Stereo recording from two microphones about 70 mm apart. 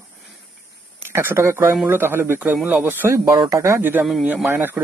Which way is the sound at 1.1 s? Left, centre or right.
Right.